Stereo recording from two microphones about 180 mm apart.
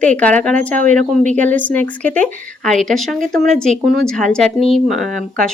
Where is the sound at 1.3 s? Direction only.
10° left (ahead or behind).